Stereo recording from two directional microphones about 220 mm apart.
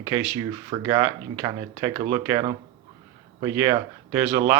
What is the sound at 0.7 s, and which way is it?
A man's voice, 15° right (ahead or behind).